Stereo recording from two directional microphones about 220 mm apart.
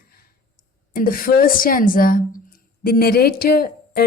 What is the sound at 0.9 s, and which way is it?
A woman's voice, 40° left (ahead or behind).